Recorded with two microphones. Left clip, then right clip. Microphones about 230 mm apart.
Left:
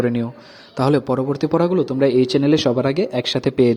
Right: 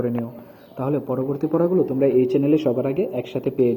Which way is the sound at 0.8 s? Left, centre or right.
Left.